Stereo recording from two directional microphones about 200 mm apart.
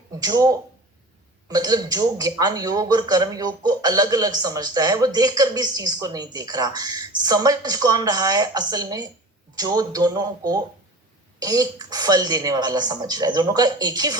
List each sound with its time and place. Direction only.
0.2 s speech: 20° right (ahead or behind)